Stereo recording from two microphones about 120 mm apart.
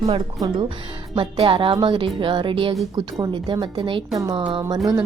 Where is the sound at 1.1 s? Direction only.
45° right (ahead or behind).